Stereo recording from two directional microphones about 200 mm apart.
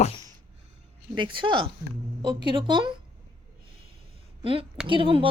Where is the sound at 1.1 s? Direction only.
25° right (ahead or behind).